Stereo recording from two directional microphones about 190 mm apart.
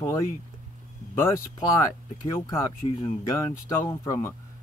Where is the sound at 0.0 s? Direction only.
15° left (ahead or behind).